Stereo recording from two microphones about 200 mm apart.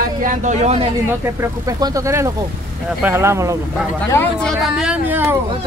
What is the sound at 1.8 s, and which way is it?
Speech, 15° right (ahead or behind).